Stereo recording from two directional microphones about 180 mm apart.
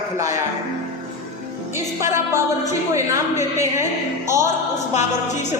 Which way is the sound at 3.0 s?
15° right (ahead or behind).